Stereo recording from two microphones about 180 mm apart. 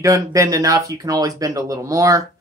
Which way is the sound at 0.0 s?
20° right (ahead or behind).